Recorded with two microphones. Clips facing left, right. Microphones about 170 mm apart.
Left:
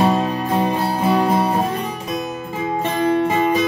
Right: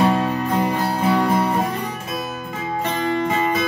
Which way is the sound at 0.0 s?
20° left (ahead or behind).